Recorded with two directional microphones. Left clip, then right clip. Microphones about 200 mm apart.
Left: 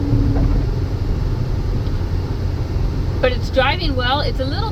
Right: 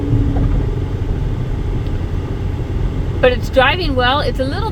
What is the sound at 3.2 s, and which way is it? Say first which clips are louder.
Speech: right 5 dB; 50° right (ahead or behind).